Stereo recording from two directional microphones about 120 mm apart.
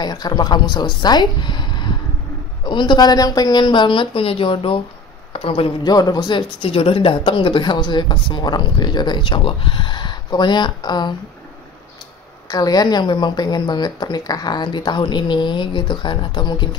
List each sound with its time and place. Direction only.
0.0 s a woman's voice: 35° left (ahead or behind)
5.9 s a woman's voice: 35° left (ahead or behind)
12.4 s a woman's voice: 30° left (ahead or behind)